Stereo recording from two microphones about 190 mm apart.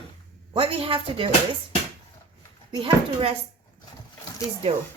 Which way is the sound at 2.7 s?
30° right (ahead or behind).